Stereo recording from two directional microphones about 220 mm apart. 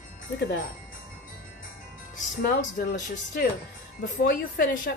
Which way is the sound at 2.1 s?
40° left (ahead or behind).